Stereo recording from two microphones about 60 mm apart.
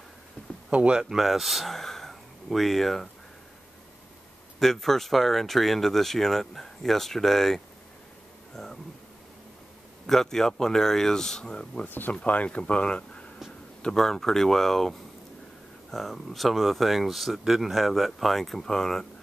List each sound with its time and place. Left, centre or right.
0.7 s speech: centre
4.6 s speech: centre
8.5 s a sound: centre
10.0 s speech: centre
11.9 s speech: left
12.2 s speech: left
13.8 s speech: centre